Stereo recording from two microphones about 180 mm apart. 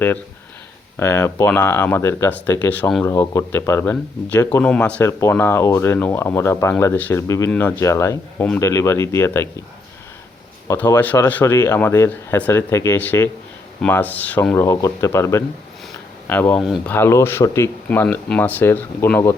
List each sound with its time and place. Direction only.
0.9 s speech: 15° left (ahead or behind)
10.7 s speech: 20° left (ahead or behind); by 16.9 s centre (ahead or behind)
16.9 s speech: 15° left (ahead or behind)